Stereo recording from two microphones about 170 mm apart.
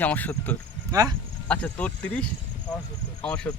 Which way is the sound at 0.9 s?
20° right (ahead or behind).